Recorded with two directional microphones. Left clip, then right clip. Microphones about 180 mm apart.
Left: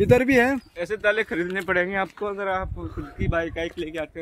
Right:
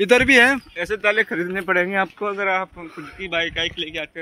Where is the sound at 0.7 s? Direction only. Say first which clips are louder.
Right 3 dB; 40° right (ahead or behind).